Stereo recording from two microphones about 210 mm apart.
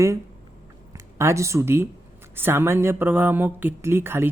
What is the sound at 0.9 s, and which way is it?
Speech, 15° right (ahead or behind).